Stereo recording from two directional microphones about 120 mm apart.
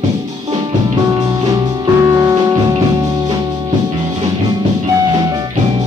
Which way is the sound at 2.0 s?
25° right (ahead or behind).